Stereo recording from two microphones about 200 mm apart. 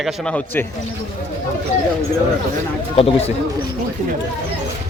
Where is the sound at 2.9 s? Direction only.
30° left (ahead or behind).